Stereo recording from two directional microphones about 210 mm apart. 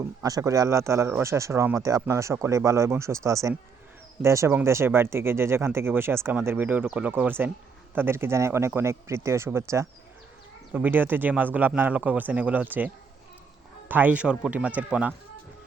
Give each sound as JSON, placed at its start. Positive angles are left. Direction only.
{"t": 0.0, "sound": "speech", "side_deg": -15}